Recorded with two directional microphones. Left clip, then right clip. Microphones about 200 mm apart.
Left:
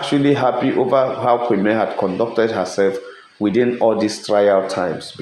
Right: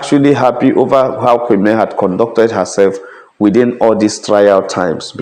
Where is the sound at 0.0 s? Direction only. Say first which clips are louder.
Right 6 dB; 45° right (ahead or behind).